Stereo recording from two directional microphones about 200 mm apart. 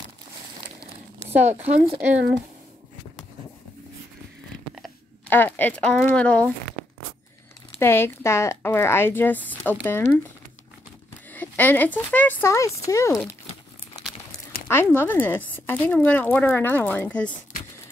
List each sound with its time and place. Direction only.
1.2 s speech: 10° right (ahead or behind)
1.7 s speech: 35° right (ahead or behind)
4.8 s speech: 10° left (ahead or behind)
7.8 s speech: 10° left (ahead or behind)
11.3 s speech: 10° left (ahead or behind)
14.7 s speech: 10° left (ahead or behind)